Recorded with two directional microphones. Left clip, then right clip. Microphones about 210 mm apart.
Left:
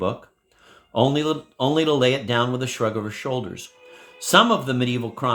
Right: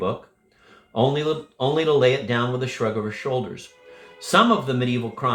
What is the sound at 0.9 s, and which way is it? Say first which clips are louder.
Speech: left 1 dB; 50° left (ahead or behind).